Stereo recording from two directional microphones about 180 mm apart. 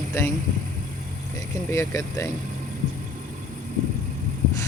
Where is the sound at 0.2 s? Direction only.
15° left (ahead or behind).